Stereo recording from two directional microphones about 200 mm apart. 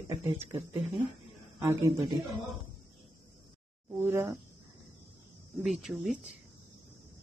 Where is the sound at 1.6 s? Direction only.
15° right (ahead or behind).